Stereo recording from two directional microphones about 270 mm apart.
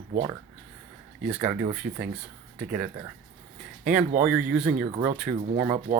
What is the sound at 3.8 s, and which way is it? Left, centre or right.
Speech, centre.